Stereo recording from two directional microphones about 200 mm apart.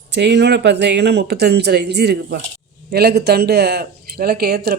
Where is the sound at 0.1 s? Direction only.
60° right (ahead or behind).